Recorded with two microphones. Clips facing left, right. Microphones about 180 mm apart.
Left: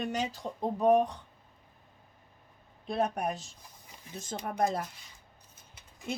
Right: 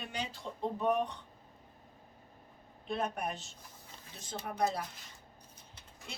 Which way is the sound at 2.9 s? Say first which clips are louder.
Left 5 dB; 40° left (ahead or behind).